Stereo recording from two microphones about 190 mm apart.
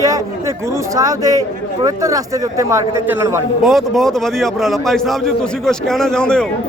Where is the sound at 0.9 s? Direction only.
20° right (ahead or behind).